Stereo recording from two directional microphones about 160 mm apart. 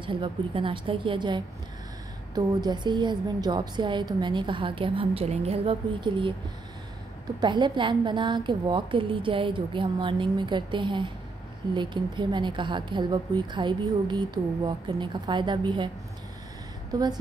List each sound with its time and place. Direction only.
0.0 s a woman's voice: 30° right (ahead or behind)
7.3 s a woman's voice: 30° right (ahead or behind)
16.9 s a woman's voice: 25° right (ahead or behind)